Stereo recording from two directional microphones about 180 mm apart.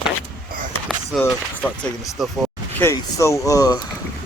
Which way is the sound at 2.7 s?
15° left (ahead or behind).